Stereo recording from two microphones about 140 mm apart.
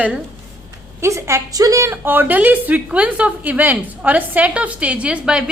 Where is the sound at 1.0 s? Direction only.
20° right (ahead or behind).